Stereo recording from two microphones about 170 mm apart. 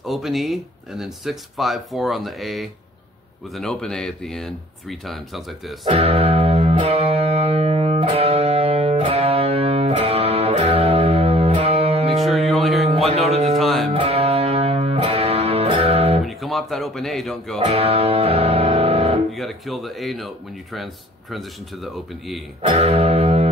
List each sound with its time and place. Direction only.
0.0 s speech: centre (ahead or behind)
5.9 s music: 35° right (ahead or behind)
12.4 s a sound: centre (ahead or behind)
12.8 s a sound: 35° right (ahead or behind)
13.3 s music: 40° right (ahead or behind)
13.6 s music: centre (ahead or behind)
13.8 s music: 35° right (ahead or behind)
16.3 s speech: centre (ahead or behind)
17.6 s music: 35° right (ahead or behind)
19.3 s speech: centre (ahead or behind)
22.7 s music: 40° right (ahead or behind)